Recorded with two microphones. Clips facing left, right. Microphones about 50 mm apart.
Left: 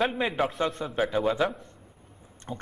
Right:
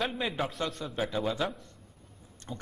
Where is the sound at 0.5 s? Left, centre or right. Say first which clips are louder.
Left 6 dB; left.